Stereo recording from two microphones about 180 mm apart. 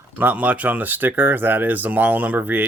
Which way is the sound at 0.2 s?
10° right (ahead or behind).